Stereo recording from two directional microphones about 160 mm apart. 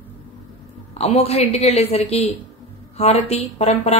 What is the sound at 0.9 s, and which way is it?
A woman's voice, 40° left (ahead or behind).